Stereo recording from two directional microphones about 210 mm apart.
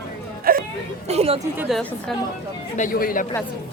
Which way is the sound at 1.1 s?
30° right (ahead or behind).